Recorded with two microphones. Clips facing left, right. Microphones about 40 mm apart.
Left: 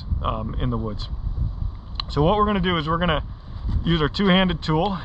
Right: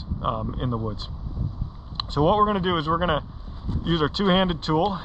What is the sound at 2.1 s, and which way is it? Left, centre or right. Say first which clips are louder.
Speech: even; left.